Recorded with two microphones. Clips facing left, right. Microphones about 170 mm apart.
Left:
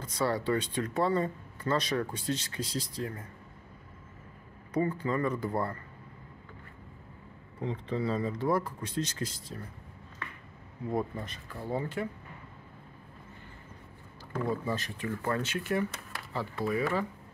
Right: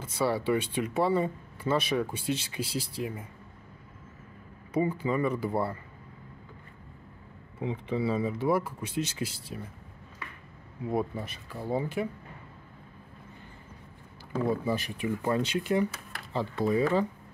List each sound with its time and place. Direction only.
0.0 s speech: 5° right (ahead or behind)
4.7 s speech: 10° right (ahead or behind)
7.6 s speech: 10° right (ahead or behind)
10.9 s speech: 10° right (ahead or behind)
14.3 s speech: 10° right (ahead or behind)